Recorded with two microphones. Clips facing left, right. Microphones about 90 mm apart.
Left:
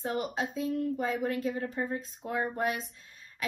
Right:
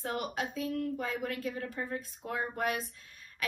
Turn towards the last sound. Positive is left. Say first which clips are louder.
# even
turn(degrees=25)  # may be behind; listen again after turning